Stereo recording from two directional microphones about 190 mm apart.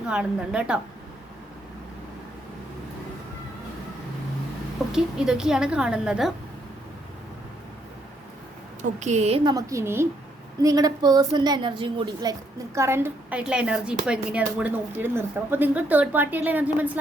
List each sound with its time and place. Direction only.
0.1 s a woman's voice: 5° right (ahead or behind)
4.9 s a woman's voice: 5° right (ahead or behind)
8.8 s a woman's voice: 35° right (ahead or behind); by 17.0 s 10° right (ahead or behind)